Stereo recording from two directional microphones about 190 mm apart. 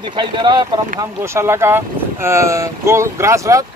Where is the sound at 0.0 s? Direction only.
25° right (ahead or behind).